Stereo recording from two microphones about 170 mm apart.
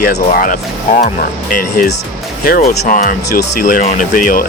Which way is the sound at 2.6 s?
50° left (ahead or behind).